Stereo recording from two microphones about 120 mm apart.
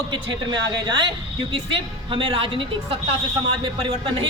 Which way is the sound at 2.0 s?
45° right (ahead or behind).